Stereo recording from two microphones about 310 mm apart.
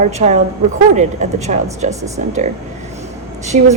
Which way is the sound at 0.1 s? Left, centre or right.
Right.